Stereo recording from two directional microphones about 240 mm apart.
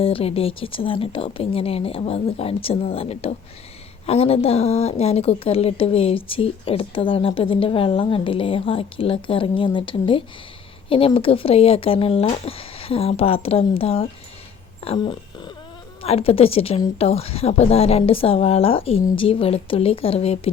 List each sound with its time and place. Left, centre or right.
0.0 s speech: left